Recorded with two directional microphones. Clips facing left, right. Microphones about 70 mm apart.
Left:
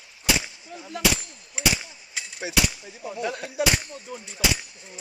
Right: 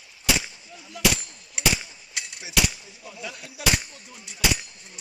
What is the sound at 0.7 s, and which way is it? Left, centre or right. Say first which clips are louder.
Speech: left 6 dB; left.